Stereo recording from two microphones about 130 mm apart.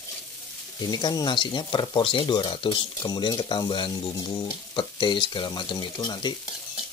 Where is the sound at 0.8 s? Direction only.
30° left (ahead or behind).